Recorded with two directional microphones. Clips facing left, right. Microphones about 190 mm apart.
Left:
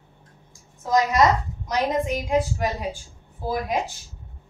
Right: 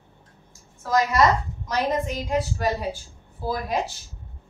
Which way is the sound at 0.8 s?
15° left (ahead or behind).